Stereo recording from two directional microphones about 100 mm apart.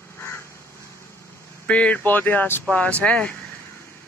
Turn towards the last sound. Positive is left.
turn(degrees=15)  # may be behind; listen again after turning